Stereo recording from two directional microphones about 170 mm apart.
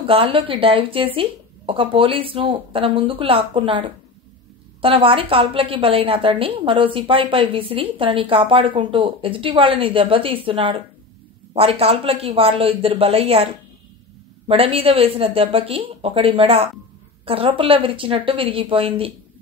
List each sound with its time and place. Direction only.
0.0 s a woman's voice: 30° right (ahead or behind)
4.8 s a woman's voice: 30° right (ahead or behind)
14.5 s a woman's voice: 35° right (ahead or behind)